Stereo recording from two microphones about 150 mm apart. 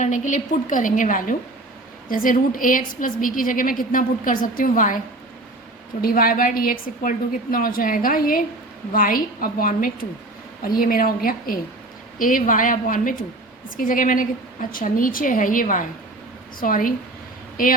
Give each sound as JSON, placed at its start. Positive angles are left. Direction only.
{"t": 0.0, "sound": "a woman's voice", "side_deg": 55}
{"t": 6.0, "sound": "a woman's voice", "side_deg": 75}